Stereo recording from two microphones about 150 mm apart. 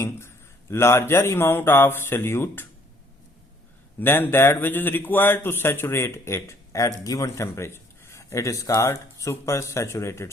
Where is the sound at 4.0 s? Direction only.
15° left (ahead or behind).